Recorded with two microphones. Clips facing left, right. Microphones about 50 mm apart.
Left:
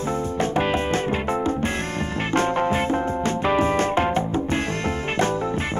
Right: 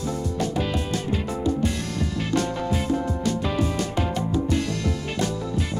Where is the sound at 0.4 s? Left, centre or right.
Left.